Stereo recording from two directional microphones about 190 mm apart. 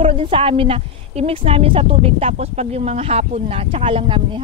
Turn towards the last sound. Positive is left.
turn(degrees=-30)  # may be behind; listen again after turning